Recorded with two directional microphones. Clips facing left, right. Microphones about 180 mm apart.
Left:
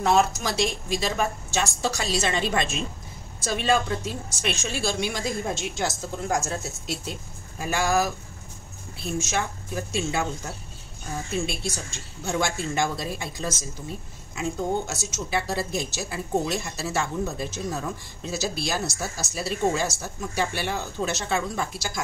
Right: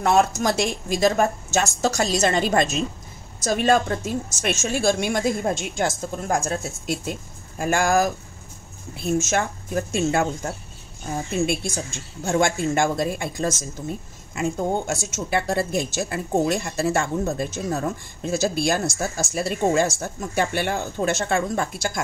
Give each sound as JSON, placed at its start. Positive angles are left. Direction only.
{"t": 0.0, "sound": "speech", "side_deg": -50}